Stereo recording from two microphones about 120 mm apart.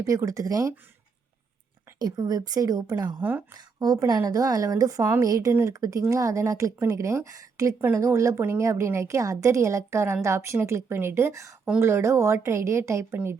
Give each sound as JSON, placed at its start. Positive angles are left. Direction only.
{"t": 0.0, "sound": "speech", "side_deg": -25}
{"t": 2.0, "sound": "speech", "side_deg": -35}
{"t": 3.2, "sound": "a woman's voice", "side_deg": -15}
{"t": 3.5, "sound": "speech", "side_deg": -30}